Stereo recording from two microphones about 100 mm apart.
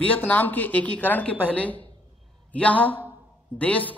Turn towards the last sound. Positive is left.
turn(degrees=15)  # may be behind; listen again after turning